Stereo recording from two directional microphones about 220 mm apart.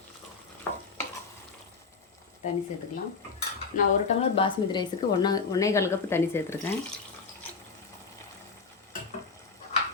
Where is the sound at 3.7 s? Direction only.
25° left (ahead or behind).